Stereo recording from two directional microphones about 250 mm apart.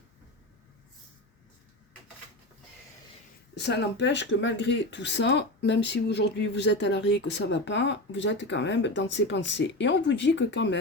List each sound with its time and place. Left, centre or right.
3.5 s speech: left